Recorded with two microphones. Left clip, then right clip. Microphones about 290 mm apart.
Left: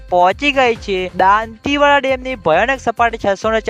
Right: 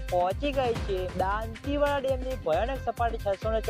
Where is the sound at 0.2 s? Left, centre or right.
Left.